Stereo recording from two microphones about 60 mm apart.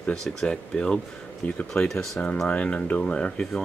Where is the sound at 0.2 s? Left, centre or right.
Centre.